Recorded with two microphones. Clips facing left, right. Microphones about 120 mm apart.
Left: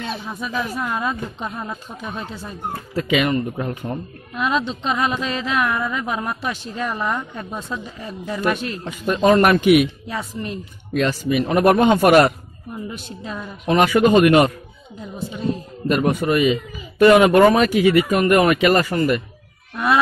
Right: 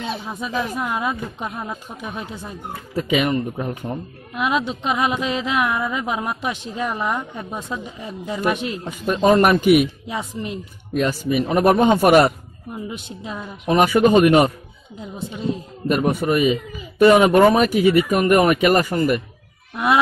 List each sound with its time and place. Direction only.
0.0 s speech: 20° right (ahead or behind)
15.0 s a woman's voice: 20° right (ahead or behind)
15.9 s speech: 10° right (ahead or behind)
19.7 s a sound: 15° right (ahead or behind)